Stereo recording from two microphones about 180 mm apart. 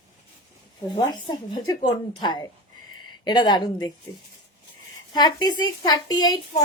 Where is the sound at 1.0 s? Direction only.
25° left (ahead or behind).